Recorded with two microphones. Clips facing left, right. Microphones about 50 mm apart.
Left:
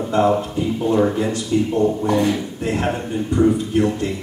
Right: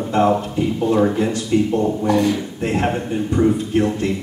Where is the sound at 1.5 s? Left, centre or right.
Right.